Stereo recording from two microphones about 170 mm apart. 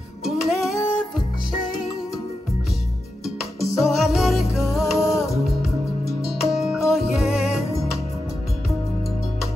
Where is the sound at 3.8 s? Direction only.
Centre (ahead or behind).